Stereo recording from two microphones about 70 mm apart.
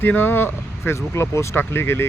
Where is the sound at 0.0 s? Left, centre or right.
Left.